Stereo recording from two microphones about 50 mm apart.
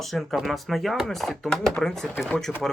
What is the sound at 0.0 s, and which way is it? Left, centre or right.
Speech, centre.